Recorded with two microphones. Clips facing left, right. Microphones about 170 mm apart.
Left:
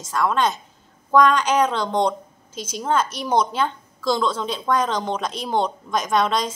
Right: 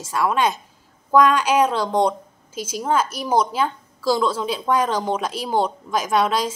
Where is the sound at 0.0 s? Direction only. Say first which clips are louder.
Right 1 dB; 10° right (ahead or behind).